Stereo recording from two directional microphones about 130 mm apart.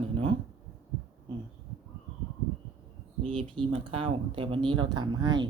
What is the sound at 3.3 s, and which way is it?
Speech, 40° right (ahead or behind).